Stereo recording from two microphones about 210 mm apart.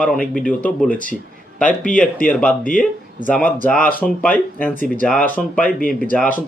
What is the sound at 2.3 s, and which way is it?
Speech, 5° left (ahead or behind).